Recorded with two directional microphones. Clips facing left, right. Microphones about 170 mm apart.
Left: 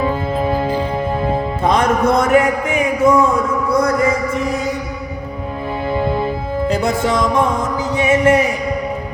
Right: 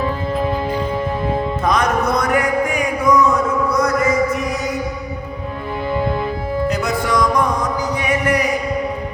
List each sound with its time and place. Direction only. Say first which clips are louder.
1.6 s music: left 4 dB; 30° left (ahead or behind)
3.7 s a sound: left 6 dB; 30° left (ahead or behind)
6.7 s music: left 5 dB; 30° left (ahead or behind)